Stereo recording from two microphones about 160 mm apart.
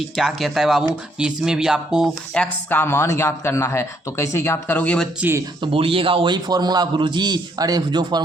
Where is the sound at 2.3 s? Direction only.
10° left (ahead or behind).